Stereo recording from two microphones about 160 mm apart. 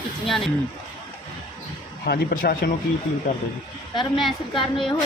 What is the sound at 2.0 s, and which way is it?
Speech, 70° left (ahead or behind).